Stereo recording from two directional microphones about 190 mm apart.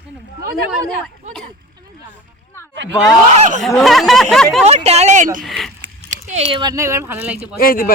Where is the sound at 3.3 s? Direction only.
35° right (ahead or behind).